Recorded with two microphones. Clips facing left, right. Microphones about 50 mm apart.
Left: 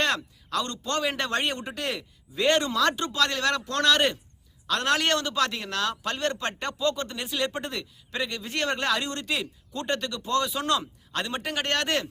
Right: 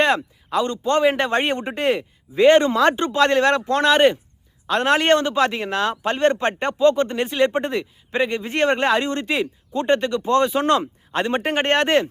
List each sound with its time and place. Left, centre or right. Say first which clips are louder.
0.5 s a man's voice: right 9 dB; centre